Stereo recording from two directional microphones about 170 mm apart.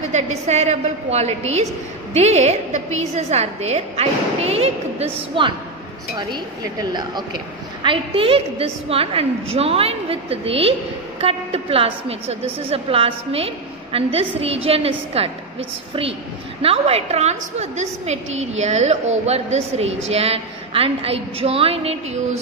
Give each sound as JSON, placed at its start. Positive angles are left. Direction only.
{"t": 0.1, "sound": "a woman's voice", "side_deg": -40}